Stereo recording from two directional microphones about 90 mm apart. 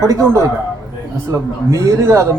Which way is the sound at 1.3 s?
40° right (ahead or behind).